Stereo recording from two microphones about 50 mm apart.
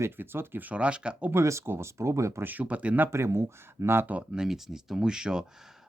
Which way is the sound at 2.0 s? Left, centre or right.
Right.